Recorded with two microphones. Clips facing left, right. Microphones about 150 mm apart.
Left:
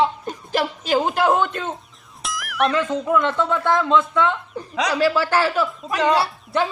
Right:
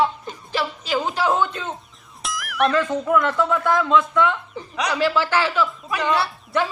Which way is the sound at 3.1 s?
25° left (ahead or behind).